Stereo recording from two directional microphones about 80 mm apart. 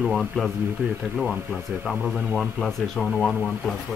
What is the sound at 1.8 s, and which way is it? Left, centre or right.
Speech, centre.